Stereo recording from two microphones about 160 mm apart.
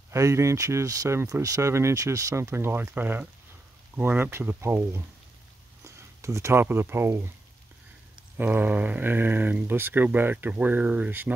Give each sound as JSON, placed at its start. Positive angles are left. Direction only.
{"t": 0.1, "sound": "speech", "side_deg": -20}